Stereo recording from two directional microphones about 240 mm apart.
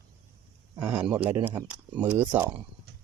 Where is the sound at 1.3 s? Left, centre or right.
Centre.